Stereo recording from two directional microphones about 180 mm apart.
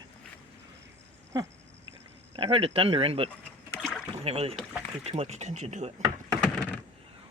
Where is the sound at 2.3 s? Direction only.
30° right (ahead or behind).